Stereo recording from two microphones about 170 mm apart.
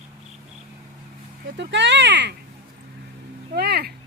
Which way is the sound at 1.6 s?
90° right.